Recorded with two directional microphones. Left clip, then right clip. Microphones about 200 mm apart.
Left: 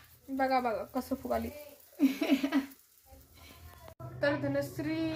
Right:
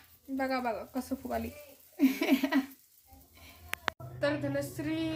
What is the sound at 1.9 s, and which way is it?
Child singing, 55° right (ahead or behind).